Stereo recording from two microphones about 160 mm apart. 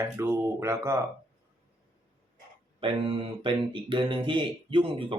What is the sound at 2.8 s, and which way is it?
Speech, 35° right (ahead or behind).